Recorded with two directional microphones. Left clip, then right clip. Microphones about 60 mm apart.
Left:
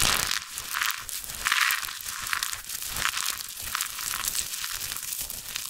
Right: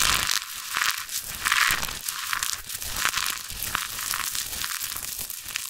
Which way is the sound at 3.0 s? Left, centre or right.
Right.